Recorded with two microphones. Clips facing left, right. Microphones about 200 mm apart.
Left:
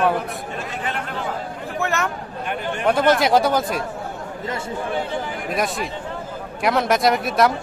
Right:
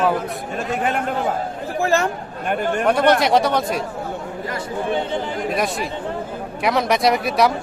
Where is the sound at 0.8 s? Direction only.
50° right (ahead or behind).